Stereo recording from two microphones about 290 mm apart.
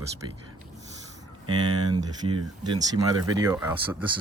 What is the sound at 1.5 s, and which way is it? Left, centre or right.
Speech, centre.